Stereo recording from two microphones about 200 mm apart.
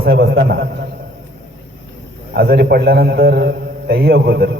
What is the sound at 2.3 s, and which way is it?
A man's voice, 55° right (ahead or behind).